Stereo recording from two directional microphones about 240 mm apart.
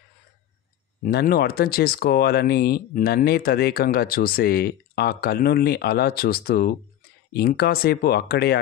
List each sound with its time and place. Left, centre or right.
1.0 s speech: left